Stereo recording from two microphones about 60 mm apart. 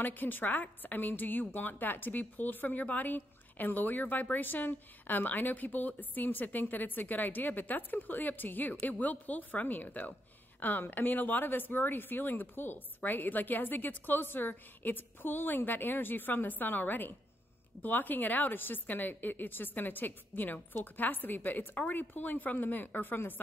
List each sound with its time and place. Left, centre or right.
0.0 s a woman's voice: left